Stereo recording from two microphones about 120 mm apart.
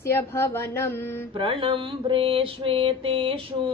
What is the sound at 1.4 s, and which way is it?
Mantra, 45° right (ahead or behind).